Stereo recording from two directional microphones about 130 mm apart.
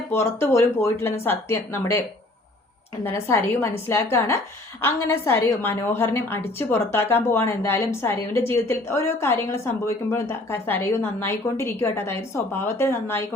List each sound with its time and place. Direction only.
0.1 s a woman's voice: 20° left (ahead or behind)